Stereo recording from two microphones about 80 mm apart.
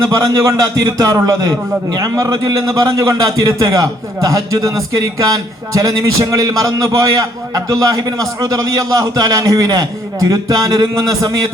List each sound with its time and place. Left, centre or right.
0.0 s a man's voice: right